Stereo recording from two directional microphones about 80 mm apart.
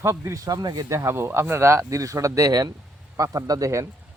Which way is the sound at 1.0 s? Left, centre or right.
Right.